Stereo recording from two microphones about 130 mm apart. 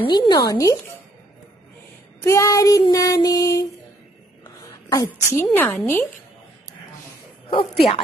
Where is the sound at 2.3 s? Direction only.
25° left (ahead or behind).